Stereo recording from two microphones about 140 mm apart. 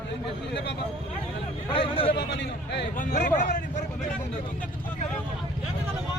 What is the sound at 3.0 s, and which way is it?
Speech, 65° left (ahead or behind).